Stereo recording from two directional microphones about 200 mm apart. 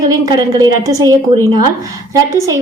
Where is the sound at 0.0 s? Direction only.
20° right (ahead or behind).